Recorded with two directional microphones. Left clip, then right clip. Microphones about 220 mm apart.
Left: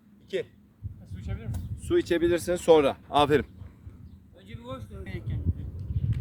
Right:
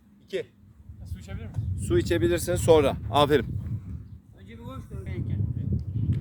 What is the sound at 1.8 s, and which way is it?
Speech, 25° right (ahead or behind).